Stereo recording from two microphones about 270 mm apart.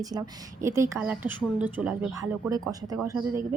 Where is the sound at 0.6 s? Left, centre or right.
Centre.